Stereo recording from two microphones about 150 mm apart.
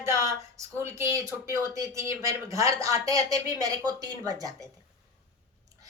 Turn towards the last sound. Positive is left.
turn(degrees=-25)  # may be behind; listen again after turning